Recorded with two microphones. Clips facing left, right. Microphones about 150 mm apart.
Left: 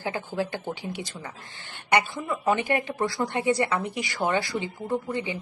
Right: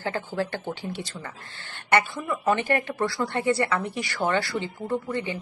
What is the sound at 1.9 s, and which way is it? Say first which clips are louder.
A woman's voice: right 1 dB; 20° left (ahead or behind).